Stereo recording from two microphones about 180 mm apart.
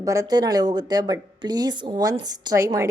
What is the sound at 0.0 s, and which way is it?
A woman's voice, 15° right (ahead or behind).